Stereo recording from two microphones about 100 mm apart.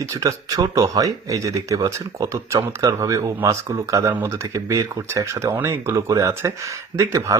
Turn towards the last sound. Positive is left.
turn(degrees=-30)  # may be behind; listen again after turning